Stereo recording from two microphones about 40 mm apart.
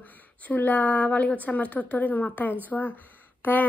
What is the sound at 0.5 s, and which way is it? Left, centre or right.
A woman's voice, left.